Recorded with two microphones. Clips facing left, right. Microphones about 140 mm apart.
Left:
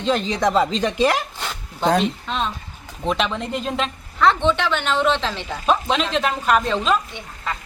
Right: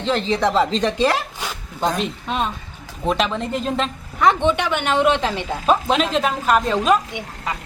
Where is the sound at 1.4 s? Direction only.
10° right (ahead or behind).